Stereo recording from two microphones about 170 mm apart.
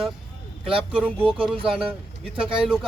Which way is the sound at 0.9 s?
5° right (ahead or behind).